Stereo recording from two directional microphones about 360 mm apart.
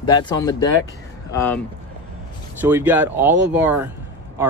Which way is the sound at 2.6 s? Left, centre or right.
Centre.